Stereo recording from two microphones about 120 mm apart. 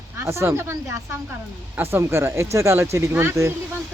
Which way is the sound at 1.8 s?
20° right (ahead or behind).